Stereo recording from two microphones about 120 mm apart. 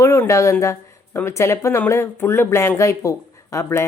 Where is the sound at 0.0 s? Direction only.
25° left (ahead or behind).